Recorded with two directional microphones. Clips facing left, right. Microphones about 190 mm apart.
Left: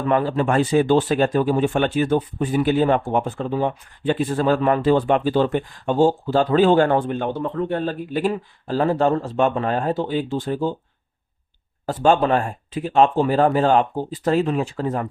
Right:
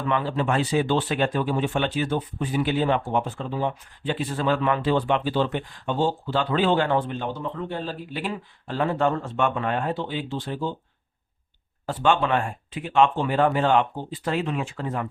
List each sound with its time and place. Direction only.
0.0 s speech: 45° left (ahead or behind)
11.9 s speech: 40° left (ahead or behind)